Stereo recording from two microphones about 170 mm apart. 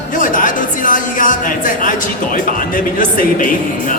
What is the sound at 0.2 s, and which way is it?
Speech, 50° left (ahead or behind).